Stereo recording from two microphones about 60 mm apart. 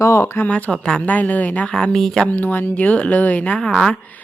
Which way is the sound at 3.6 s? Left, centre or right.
Centre.